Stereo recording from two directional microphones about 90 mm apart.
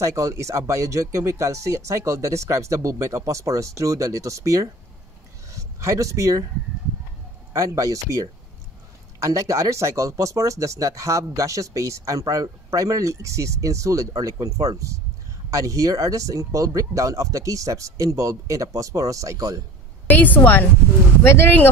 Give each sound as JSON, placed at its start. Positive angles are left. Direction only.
{"t": 0.0, "sound": "speech", "side_deg": -35}
{"t": 7.5, "sound": "speech", "side_deg": -40}
{"t": 20.1, "sound": "a woman's voice", "side_deg": 20}